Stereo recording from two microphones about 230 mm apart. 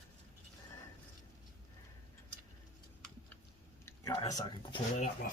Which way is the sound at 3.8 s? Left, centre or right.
Centre.